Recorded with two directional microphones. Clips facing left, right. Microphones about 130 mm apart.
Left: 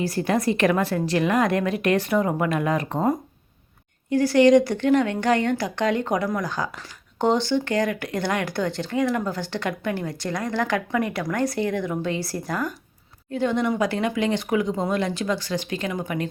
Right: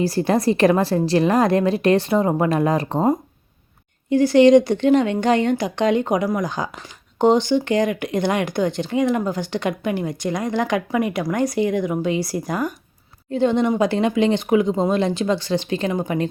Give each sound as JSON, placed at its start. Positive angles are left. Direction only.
{"t": 0.0, "sound": "a woman's voice", "side_deg": -35}
{"t": 13.3, "sound": "speech", "side_deg": -25}